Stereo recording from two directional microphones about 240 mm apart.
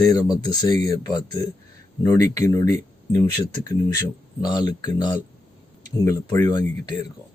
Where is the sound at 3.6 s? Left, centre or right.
Centre.